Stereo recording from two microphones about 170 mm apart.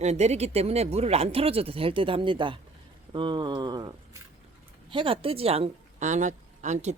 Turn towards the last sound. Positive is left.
turn(degrees=-45)  # may be behind; listen again after turning